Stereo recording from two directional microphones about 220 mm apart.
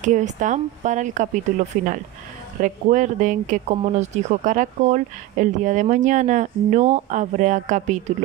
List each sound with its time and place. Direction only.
0.0 s speech: 35° right (ahead or behind)